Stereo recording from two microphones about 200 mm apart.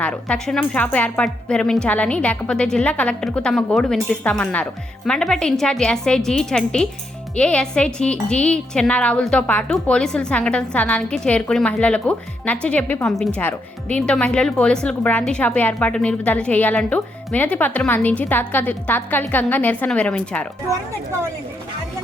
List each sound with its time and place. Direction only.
0.0 s a woman's voice: 5° left (ahead or behind)